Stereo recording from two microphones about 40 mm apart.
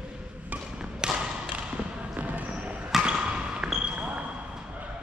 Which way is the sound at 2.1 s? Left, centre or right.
Right.